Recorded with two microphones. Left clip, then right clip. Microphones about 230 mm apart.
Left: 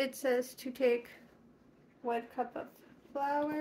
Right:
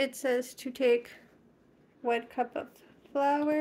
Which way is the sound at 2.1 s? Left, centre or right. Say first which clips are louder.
Right 5 dB; right.